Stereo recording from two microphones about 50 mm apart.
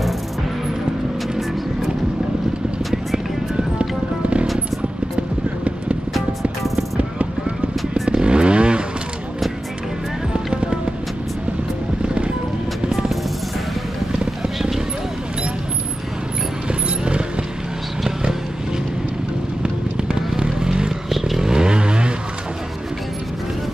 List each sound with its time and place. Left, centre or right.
3.5 s music: right
6.6 s music: centre
8.1 s vehicle: centre
10.3 s music: centre
12.9 s vehicle: centre
16.6 s mechanisms: right
19.6 s vehicle: centre